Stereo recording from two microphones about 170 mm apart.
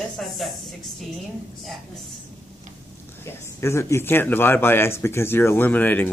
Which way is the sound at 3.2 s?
15° left (ahead or behind).